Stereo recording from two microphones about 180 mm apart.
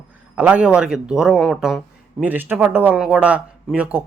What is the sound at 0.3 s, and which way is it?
Speech, 5° right (ahead or behind).